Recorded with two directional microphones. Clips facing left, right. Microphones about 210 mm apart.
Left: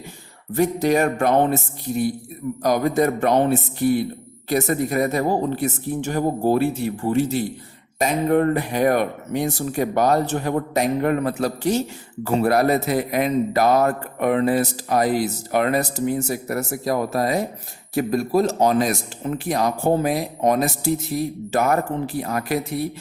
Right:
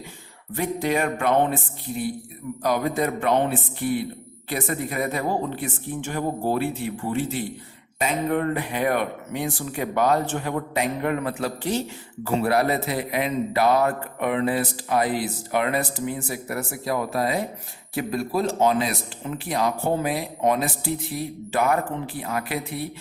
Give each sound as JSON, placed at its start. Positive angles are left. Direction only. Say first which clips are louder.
{"t": 0.5, "sound": "a man's voice", "louder": "left 6 dB", "side_deg": 40}